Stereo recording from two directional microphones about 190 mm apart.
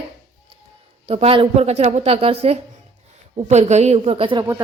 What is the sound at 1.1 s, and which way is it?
A woman's voice, 30° right (ahead or behind).